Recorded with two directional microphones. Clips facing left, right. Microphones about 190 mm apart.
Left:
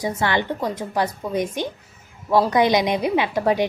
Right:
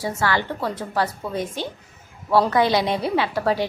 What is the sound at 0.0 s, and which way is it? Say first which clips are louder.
A woman's voice: left 1 dB; 20° left (ahead or behind).